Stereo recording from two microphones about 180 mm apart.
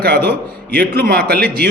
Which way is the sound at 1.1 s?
60° right (ahead or behind).